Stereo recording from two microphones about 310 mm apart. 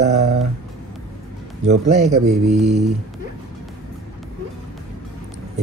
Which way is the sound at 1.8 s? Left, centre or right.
Right.